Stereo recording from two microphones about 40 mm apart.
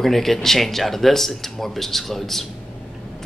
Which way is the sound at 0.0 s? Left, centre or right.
Centre.